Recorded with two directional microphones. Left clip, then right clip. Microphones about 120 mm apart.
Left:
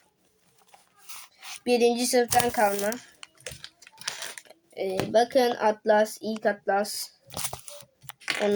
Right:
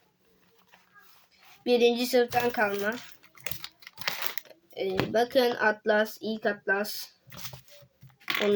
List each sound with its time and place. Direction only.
1.6 s speech: centre (ahead or behind)
4.8 s speech: centre (ahead or behind)
7.3 s a sound: 90° left
8.2 s typing: 55° right (ahead or behind)